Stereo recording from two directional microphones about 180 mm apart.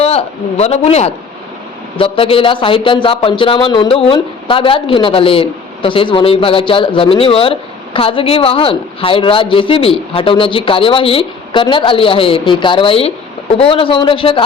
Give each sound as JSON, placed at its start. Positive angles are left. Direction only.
{"t": 0.0, "sound": "speech", "side_deg": 35}